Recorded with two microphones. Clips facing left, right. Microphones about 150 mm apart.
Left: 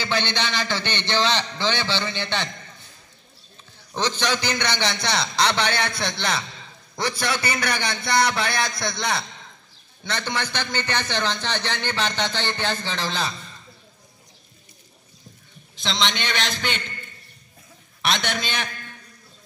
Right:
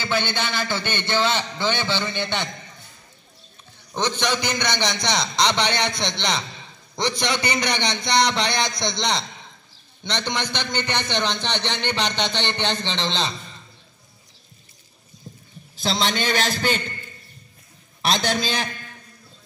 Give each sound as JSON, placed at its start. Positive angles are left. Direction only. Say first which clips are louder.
{"t": 0.0, "sound": "a man's voice", "louder": "right 1 dB", "side_deg": -10}
{"t": 4.2, "sound": "a man's voice", "louder": "right 1 dB", "side_deg": -15}
{"t": 15.8, "sound": "a man's voice", "louder": "right 3 dB", "side_deg": -40}
{"t": 18.0, "sound": "a man's voice", "louder": "right 3 dB", "side_deg": -35}